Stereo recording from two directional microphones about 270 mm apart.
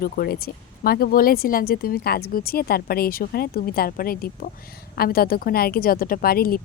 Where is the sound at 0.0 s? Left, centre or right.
Left.